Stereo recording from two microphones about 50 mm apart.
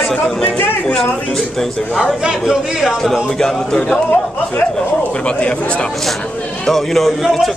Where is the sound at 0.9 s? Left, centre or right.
Centre.